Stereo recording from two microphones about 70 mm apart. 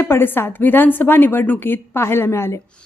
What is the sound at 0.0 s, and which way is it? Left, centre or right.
Speech, left.